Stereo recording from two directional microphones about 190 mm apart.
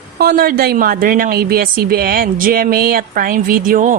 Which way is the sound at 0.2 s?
50° right (ahead or behind).